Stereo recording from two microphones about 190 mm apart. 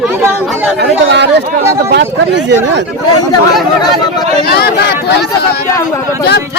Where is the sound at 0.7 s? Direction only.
65° right (ahead or behind).